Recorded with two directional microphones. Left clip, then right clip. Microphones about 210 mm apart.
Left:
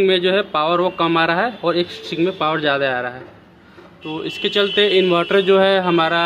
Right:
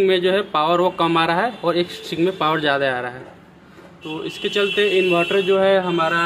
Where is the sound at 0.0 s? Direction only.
5° left (ahead or behind).